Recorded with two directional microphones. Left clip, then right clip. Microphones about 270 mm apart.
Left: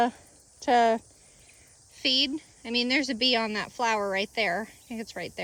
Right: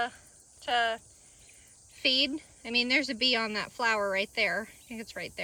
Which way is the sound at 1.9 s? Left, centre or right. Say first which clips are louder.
Left 1 dB; centre.